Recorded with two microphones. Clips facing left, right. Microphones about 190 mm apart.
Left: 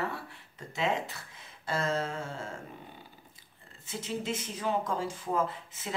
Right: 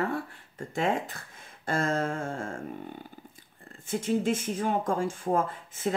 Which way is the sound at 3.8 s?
50° right (ahead or behind).